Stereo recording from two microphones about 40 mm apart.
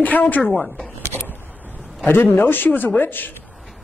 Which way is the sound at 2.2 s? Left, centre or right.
Left.